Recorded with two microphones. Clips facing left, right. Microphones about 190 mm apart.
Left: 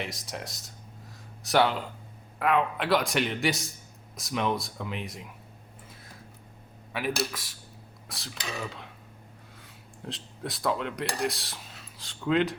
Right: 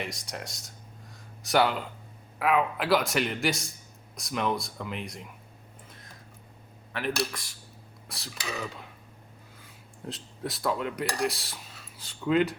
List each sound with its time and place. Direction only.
0.0 s speech: centre (ahead or behind)
6.9 s speech: 5° left (ahead or behind)
10.1 s speech: centre (ahead or behind)